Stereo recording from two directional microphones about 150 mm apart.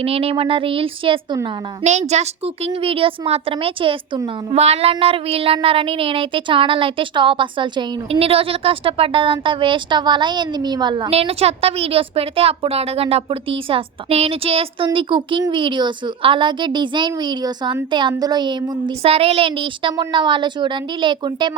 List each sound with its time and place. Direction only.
0.0 s speech: 40° right (ahead or behind)
1.8 s speech: 50° right (ahead or behind); by 11.1 s 30° right (ahead or behind)
11.1 s speech: 40° right (ahead or behind)